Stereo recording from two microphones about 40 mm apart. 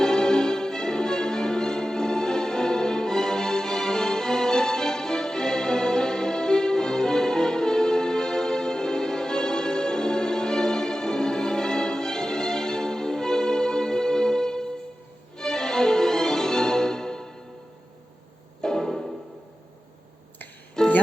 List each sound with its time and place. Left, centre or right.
0.0 s music: centre
18.6 s music: centre
20.8 s music: centre